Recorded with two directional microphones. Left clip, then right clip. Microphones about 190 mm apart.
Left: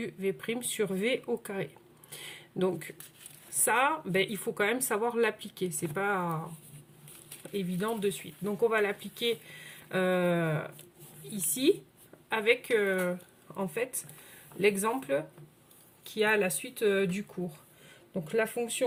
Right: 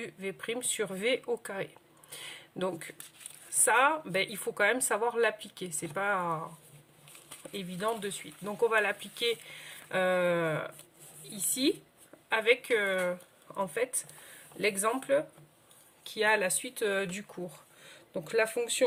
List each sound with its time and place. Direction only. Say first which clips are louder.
0.0 s speech: left 4 dB; 10° right (ahead or behind)
7.5 s speech: even; 15° right (ahead or behind); by 18.9 s 30° right (ahead or behind)